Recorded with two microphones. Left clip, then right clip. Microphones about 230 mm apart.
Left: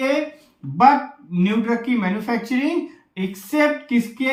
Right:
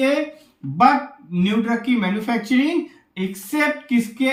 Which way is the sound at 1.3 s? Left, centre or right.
Centre.